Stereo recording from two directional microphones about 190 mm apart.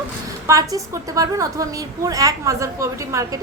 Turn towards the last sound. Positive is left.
turn(degrees=-15)  # may be behind; listen again after turning